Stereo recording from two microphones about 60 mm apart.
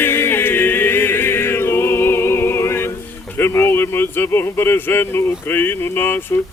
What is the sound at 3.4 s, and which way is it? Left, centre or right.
Speech, left.